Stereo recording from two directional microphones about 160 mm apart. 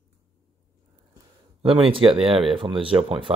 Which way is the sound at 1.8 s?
35° right (ahead or behind).